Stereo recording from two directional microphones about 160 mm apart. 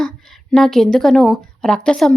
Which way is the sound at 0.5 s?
5° left (ahead or behind).